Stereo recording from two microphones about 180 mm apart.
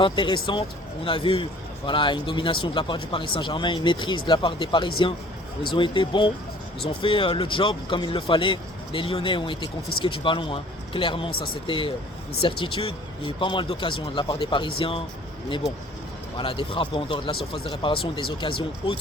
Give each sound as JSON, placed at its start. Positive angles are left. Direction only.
{"t": 0.0, "sound": "speech", "side_deg": 25}